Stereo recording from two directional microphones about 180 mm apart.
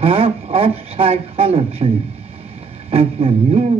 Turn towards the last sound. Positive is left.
turn(degrees=-30)  # may be behind; listen again after turning